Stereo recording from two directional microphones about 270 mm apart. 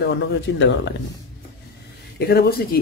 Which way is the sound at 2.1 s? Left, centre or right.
Left.